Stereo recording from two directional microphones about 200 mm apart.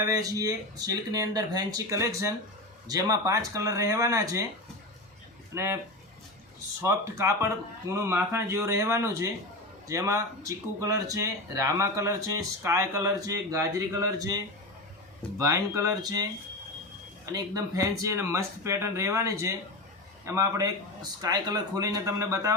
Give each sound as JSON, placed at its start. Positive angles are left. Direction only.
{"t": 0.0, "sound": "speech", "side_deg": -20}
{"t": 5.5, "sound": "speech", "side_deg": -15}
{"t": 6.8, "sound": "speech", "side_deg": -15}
{"t": 15.4, "sound": "speech", "side_deg": -15}
{"t": 17.3, "sound": "speech", "side_deg": -15}